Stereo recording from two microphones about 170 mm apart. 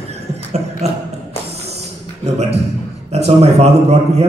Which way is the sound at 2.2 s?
40° right (ahead or behind).